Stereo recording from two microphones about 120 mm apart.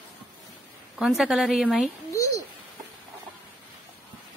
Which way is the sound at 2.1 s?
25° left (ahead or behind).